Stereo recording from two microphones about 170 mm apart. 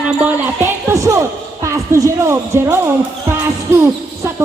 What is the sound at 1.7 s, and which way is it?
Speech, 20° right (ahead or behind).